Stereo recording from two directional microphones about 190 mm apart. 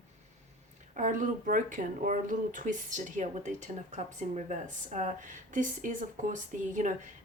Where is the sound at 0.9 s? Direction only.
40° right (ahead or behind).